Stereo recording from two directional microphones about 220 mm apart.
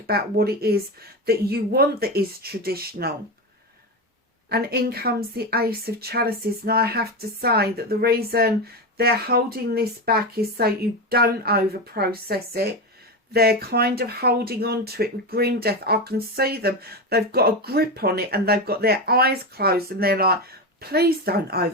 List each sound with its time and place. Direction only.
0.1 s speech: 45° right (ahead or behind)
4.4 s speech: 45° right (ahead or behind)